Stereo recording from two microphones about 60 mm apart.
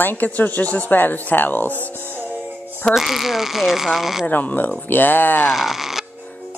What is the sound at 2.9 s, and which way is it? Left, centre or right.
Speech, centre.